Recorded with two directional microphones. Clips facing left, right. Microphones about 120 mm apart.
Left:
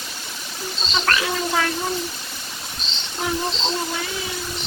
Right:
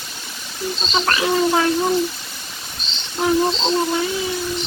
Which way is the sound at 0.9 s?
25° right (ahead or behind).